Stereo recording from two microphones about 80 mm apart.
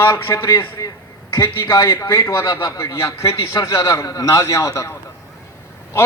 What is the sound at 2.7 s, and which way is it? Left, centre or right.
A man's voice, left.